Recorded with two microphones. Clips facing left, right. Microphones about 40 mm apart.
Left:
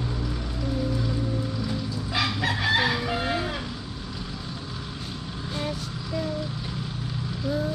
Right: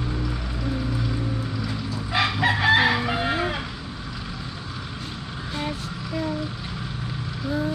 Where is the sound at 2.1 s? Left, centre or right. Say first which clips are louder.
Right 5 dB; right.